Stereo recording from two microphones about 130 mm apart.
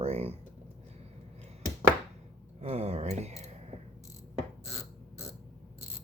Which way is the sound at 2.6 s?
55° right (ahead or behind).